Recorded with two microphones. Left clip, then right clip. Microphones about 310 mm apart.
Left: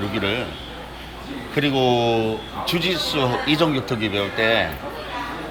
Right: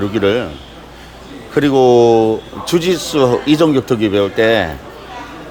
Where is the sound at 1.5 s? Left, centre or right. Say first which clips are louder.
Right 9 dB; right.